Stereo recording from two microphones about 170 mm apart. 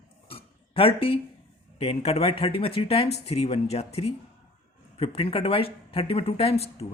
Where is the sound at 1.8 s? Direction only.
35° left (ahead or behind).